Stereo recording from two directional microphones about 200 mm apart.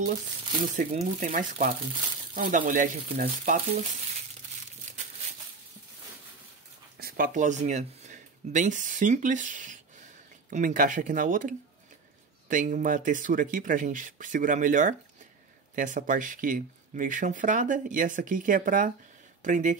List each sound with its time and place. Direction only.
0.6 s speech: 40° right (ahead or behind)
4.9 s a sound: 40° right (ahead or behind)
7.0 s speech: 45° right (ahead or behind)